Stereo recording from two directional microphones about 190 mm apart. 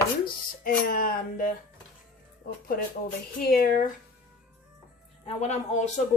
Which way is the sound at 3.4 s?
50° left (ahead or behind).